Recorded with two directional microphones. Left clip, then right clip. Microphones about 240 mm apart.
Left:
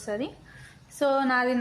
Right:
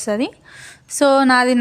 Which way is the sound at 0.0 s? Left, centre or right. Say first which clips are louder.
Right 11 dB; right.